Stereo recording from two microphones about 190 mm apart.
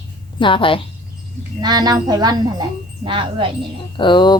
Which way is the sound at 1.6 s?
20° right (ahead or behind).